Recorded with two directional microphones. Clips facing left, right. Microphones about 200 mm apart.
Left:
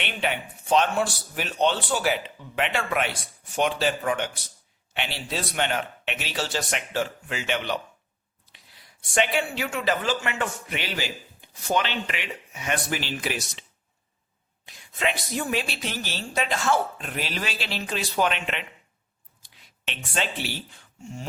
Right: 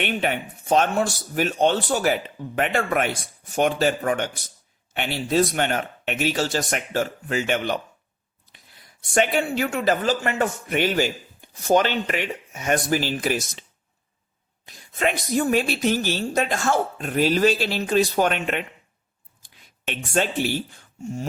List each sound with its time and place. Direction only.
0.0 s a man's voice: 45° right (ahead or behind)
9.1 s a man's voice: 45° right (ahead or behind)